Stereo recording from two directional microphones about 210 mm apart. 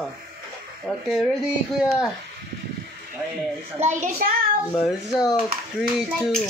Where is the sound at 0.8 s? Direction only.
Centre (ahead or behind).